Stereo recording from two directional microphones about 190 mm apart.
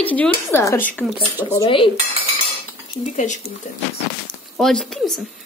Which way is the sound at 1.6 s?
25° left (ahead or behind).